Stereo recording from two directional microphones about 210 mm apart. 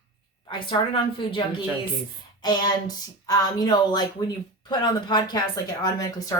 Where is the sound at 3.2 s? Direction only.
15° left (ahead or behind).